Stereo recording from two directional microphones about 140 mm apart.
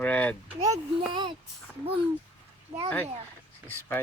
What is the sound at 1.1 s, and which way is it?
Speech, 35° right (ahead or behind).